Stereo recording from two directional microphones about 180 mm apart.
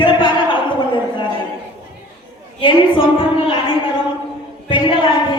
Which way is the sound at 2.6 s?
30° left (ahead or behind).